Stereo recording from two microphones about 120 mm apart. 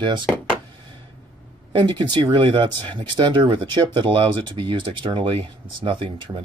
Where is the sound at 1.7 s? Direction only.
40° right (ahead or behind).